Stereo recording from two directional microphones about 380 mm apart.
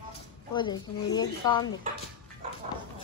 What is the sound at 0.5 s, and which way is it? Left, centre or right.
A woman's voice, centre.